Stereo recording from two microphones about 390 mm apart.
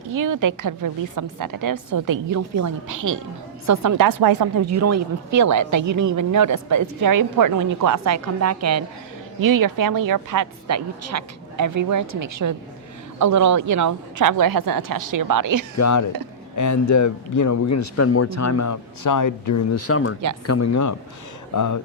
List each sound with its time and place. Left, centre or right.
0.1 s a woman's voice: right
4.6 s a woman's voice: right
9.4 s a woman's voice: right
15.8 s a man's voice: left
19.9 s speech: left
20.5 s a man's voice: left